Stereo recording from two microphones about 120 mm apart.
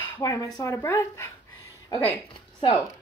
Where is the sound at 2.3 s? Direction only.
45° left (ahead or behind).